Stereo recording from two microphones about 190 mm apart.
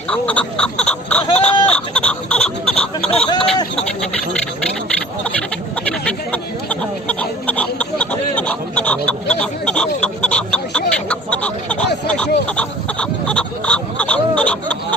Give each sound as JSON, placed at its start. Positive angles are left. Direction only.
{"t": 0.1, "sound": "speech", "side_deg": 5}
{"t": 3.1, "sound": "speech", "side_deg": 30}
{"t": 5.9, "sound": "a sound", "side_deg": 5}